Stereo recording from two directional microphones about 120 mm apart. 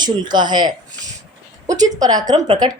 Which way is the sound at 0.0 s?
40° right (ahead or behind).